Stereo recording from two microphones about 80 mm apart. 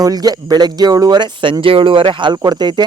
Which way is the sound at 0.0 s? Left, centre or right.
Right.